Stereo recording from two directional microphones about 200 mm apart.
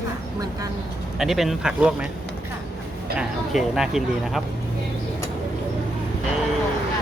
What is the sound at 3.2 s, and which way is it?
Speech, centre (ahead or behind).